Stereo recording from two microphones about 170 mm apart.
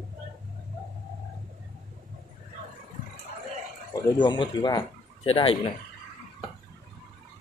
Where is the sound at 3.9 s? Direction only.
25° left (ahead or behind).